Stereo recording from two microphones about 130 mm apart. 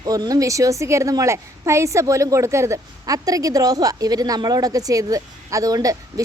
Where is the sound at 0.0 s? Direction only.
30° right (ahead or behind).